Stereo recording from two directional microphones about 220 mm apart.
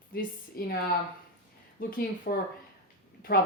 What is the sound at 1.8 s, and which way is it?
Speech, 40° left (ahead or behind).